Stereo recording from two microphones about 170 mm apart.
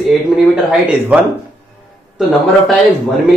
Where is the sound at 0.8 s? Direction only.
10° right (ahead or behind).